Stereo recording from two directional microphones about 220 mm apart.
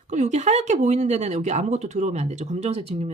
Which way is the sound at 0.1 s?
35° right (ahead or behind).